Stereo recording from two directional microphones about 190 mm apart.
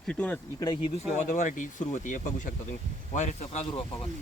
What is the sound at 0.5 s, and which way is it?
Speech, 25° left (ahead or behind).